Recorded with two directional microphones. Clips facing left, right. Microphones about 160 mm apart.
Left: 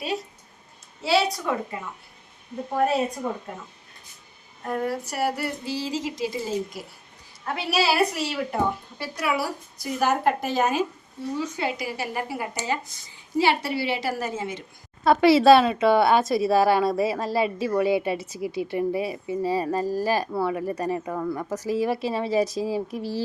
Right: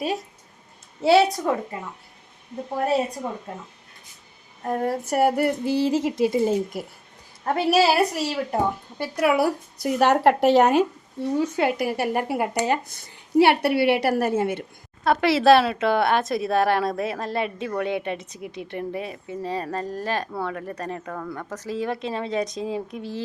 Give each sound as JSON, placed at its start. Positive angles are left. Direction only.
{"t": 1.0, "sound": "a woman's voice", "side_deg": -50}
{"t": 4.6, "sound": "speech", "side_deg": -35}
{"t": 7.4, "sound": "a woman's voice", "side_deg": -45}
{"t": 9.1, "sound": "speech", "side_deg": -55}
{"t": 15.0, "sound": "speech", "side_deg": 0}